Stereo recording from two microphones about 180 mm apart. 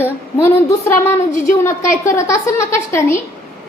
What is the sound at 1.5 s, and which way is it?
A woman's voice, 15° left (ahead or behind).